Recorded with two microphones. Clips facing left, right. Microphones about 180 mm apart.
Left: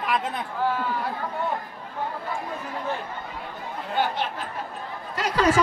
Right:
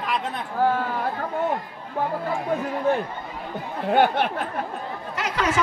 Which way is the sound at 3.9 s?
60° right (ahead or behind).